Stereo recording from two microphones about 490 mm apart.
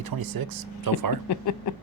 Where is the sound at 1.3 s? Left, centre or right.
Left.